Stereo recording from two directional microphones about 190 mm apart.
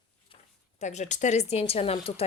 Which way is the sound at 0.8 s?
40° left (ahead or behind).